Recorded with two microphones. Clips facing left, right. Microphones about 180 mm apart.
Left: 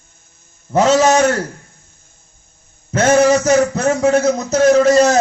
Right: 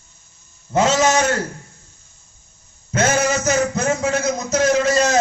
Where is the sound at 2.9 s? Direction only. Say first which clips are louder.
Left 7 dB; 30° left (ahead or behind).